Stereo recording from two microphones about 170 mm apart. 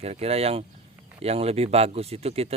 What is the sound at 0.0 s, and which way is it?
Speech, 40° right (ahead or behind).